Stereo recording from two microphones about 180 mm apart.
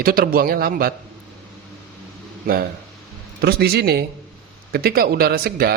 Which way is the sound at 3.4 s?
60° right (ahead or behind).